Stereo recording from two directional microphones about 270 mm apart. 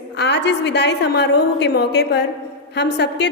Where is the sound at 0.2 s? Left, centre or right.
Left.